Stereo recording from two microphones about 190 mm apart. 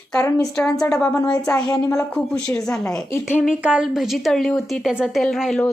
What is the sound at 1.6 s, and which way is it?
Speech, 20° left (ahead or behind).